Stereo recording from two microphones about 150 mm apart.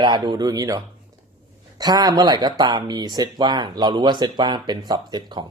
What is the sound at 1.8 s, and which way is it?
Speech, 25° right (ahead or behind).